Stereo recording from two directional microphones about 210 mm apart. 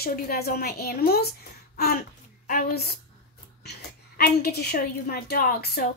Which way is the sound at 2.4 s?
45° left (ahead or behind).